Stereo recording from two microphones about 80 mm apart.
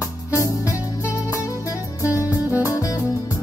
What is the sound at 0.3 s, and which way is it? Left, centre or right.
Music, left.